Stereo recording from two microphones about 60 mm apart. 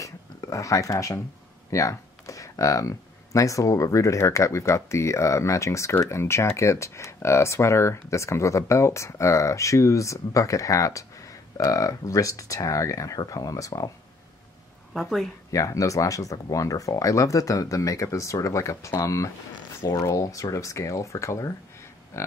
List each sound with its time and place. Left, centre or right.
0.0 s a sound: left
1.7 s speech: left
15.0 s a woman's voice: centre
15.5 s speech: left
22.1 s cattle: left